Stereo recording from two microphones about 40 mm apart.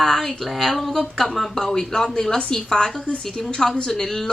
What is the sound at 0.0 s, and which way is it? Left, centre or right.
A woman's voice, centre.